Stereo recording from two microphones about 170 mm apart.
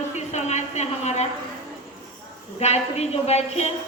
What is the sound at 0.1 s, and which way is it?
A woman's voice, 40° left (ahead or behind).